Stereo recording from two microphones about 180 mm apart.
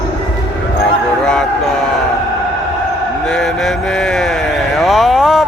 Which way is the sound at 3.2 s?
Centre (ahead or behind).